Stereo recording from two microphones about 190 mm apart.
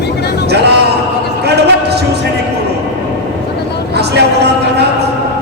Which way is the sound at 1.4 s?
60° right (ahead or behind).